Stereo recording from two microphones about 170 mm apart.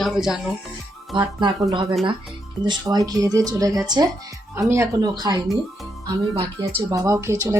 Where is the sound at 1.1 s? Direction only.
25° right (ahead or behind).